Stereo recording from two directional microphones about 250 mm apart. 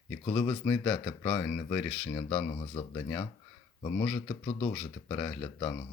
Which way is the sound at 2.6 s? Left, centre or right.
Centre.